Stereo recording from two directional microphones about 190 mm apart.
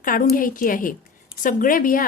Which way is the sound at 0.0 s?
45° left (ahead or behind).